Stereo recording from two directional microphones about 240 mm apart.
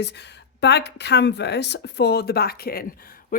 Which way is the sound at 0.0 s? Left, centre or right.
Left.